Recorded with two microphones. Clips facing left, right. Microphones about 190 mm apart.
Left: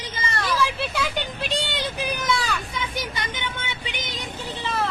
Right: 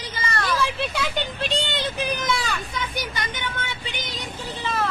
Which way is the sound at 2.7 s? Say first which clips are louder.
Even; 25° left (ahead or behind).